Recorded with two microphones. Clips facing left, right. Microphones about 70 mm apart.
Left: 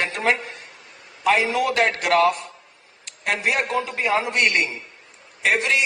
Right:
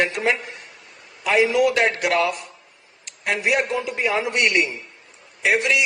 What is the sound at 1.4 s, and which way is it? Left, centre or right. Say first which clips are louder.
A man's voice: right 3 dB; left.